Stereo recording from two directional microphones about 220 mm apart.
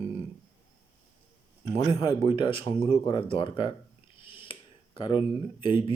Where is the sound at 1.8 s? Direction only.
20° left (ahead or behind).